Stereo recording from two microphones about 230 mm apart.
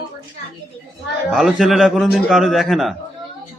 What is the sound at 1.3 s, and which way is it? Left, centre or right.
A man's voice, centre.